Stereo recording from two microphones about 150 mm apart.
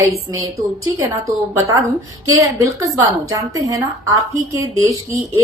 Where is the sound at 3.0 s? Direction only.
20° right (ahead or behind).